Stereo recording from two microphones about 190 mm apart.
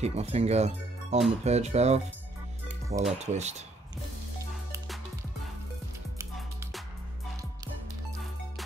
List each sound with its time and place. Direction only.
0.0 s speech: 35° right (ahead or behind)